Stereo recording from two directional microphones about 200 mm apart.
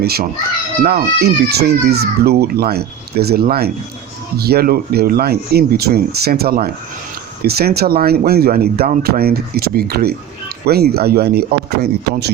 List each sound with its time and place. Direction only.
0.0 s speech: 50° right (ahead or behind)